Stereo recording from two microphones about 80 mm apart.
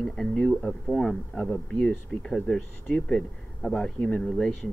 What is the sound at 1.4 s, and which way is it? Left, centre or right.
Speech, centre.